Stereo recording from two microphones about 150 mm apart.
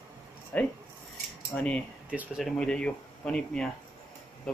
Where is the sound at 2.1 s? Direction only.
10° right (ahead or behind).